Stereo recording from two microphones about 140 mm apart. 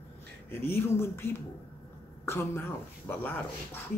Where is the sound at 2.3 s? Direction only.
15° left (ahead or behind).